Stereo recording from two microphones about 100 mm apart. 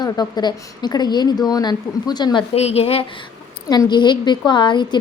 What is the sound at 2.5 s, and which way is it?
Speech, 90° left.